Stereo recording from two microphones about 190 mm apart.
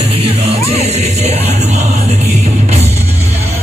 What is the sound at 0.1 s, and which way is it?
Music, 30° right (ahead or behind).